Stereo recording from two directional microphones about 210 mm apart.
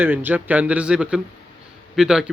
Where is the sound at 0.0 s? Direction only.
10° right (ahead or behind).